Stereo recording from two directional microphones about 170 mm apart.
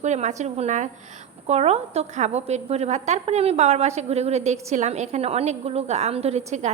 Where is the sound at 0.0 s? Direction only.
45° right (ahead or behind).